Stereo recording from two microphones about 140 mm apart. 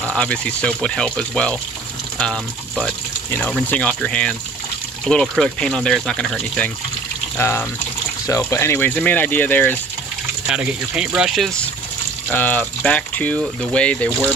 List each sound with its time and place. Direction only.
0.0 s speech: 5° left (ahead or behind)
7.3 s speech: 15° left (ahead or behind)
10.4 s speech: 10° right (ahead or behind)
12.3 s speech: 10° left (ahead or behind)